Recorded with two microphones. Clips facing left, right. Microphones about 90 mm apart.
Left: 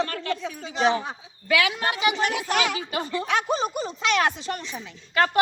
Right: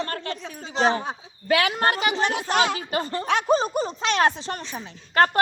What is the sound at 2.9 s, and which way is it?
A woman's voice, 45° right (ahead or behind).